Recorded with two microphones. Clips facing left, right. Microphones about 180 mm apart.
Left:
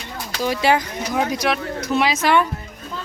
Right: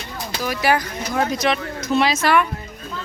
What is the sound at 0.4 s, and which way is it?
Speech, 25° left (ahead or behind).